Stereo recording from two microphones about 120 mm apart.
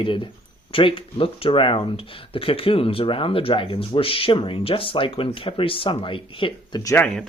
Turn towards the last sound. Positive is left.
turn(degrees=45)  # may be behind; listen again after turning